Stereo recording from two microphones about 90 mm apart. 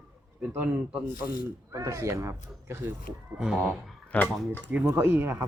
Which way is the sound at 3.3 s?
5° right (ahead or behind).